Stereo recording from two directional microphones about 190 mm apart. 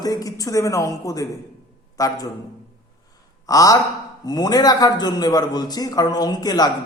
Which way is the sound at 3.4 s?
20° left (ahead or behind).